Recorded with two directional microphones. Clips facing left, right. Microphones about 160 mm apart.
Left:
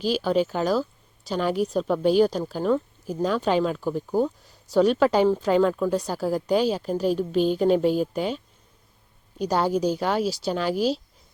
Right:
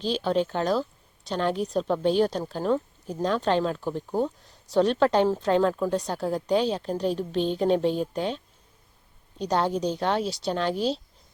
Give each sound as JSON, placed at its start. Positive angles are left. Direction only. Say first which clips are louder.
{"t": 0.0, "sound": "speech", "louder": "left 2 dB", "side_deg": 5}
{"t": 9.4, "sound": "speech", "louder": "left 2 dB", "side_deg": 5}